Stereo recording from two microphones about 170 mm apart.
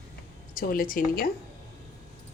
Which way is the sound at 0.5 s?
55° left (ahead or behind).